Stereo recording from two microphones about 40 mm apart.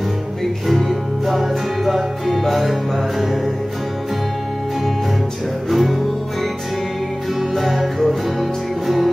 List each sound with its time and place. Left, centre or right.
0.7 s music: centre
5.7 s music: centre
7.3 s music: centre